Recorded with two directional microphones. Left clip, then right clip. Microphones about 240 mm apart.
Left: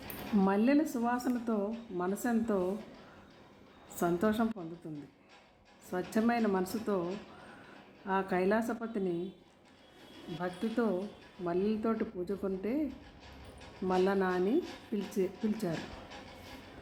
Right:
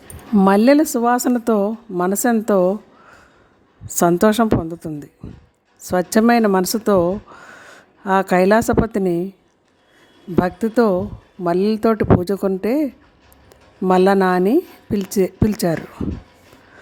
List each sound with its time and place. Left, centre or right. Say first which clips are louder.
0.3 s speech: right 16 dB; right
3.9 s speech: right 17 dB; right
5.9 s speech: right 17 dB; right
8.0 s speech: right 16 dB; right
10.4 s speech: right 16 dB; right